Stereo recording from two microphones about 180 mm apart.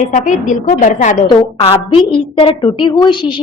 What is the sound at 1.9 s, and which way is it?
A woman's voice, 30° left (ahead or behind).